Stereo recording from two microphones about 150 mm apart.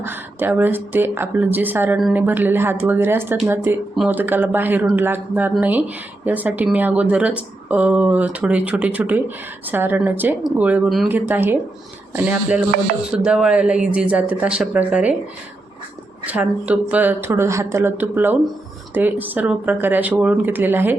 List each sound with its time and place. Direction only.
0.0 s speech: 15° right (ahead or behind)
11.1 s speech: 15° right (ahead or behind)
16.2 s speech: 10° right (ahead or behind)